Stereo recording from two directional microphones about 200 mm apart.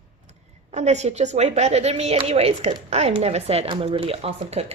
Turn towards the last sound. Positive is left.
turn(degrees=-30)  # may be behind; listen again after turning